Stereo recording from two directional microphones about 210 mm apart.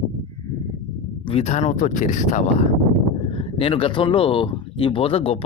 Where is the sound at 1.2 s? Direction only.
30° left (ahead or behind).